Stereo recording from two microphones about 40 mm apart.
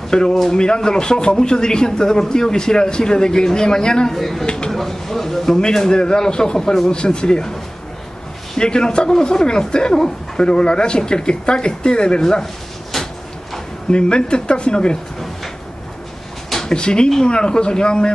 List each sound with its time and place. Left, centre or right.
0.1 s a man's voice: centre
4.1 s a man's voice: centre
4.5 s a sound: left
4.7 s a man's voice: centre
8.5 s a man's voice: centre
12.9 s a sound: centre
13.8 s a man's voice: left
16.6 s a man's voice: left